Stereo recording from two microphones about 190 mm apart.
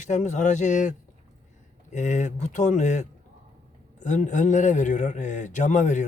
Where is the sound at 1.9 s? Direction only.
40° left (ahead or behind).